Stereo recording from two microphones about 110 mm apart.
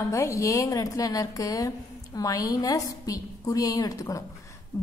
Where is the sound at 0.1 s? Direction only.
30° left (ahead or behind).